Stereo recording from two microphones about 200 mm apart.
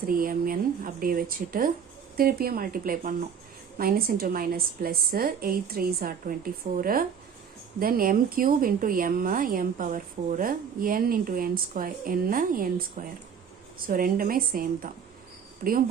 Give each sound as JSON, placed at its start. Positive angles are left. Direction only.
{"t": 0.0, "sound": "speech", "side_deg": -45}